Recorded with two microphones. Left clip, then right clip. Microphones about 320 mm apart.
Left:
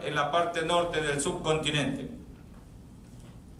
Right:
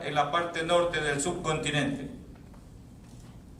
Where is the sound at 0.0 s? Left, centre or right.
Centre.